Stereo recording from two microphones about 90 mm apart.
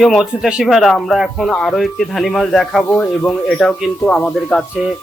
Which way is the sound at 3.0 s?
15° left (ahead or behind).